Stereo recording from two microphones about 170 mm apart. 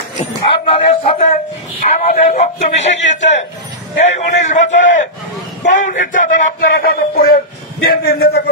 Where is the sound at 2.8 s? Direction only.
90° left.